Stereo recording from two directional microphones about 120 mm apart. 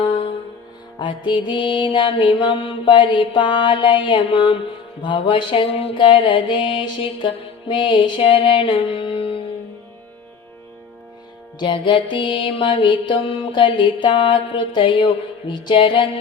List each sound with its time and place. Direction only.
0.0 s music: 45° left (ahead or behind)
11.6 s music: 40° left (ahead or behind)